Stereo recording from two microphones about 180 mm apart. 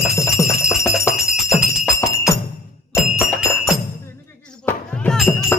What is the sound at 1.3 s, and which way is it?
Music, 5° right (ahead or behind).